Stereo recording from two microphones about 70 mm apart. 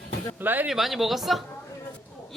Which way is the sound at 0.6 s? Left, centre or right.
Centre.